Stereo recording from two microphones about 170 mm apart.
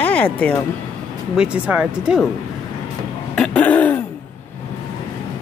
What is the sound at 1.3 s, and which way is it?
Speech, 5° right (ahead or behind).